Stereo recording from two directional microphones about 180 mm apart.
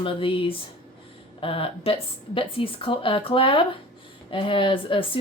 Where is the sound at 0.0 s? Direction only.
30° left (ahead or behind).